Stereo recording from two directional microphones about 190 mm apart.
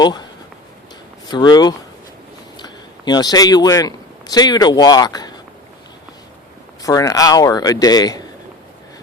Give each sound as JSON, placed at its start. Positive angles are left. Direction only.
{"t": 0.0, "sound": "speech", "side_deg": 20}
{"t": 1.3, "sound": "a man's voice", "side_deg": 20}
{"t": 6.8, "sound": "speech", "side_deg": 20}